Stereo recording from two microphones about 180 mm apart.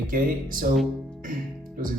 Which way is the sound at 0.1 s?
50° right (ahead or behind).